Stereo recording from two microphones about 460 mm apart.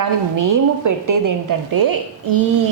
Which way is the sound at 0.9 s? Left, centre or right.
Right.